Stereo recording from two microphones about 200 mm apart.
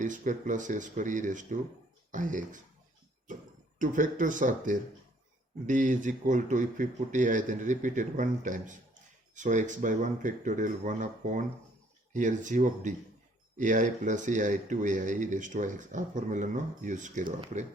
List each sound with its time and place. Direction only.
0.0 s speech: 40° right (ahead or behind)
3.8 s speech: 40° right (ahead or behind)